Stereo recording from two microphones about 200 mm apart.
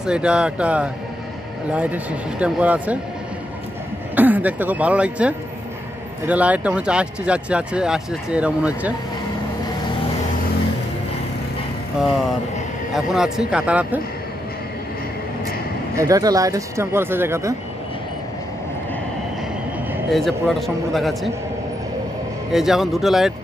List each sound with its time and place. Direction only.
0.0 s speech: 5° right (ahead or behind)
4.1 s speech: 10° right (ahead or behind)
12.9 s speech: 5° right (ahead or behind)
16.0 s speech: 15° right (ahead or behind)
20.1 s speech: centre (ahead or behind)
22.5 s speech: centre (ahead or behind)